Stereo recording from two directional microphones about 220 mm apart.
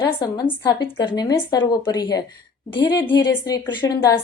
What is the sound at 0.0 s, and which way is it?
A woman's voice, 20° left (ahead or behind).